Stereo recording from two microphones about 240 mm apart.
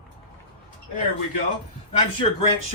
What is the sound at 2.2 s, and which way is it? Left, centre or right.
Speech, left.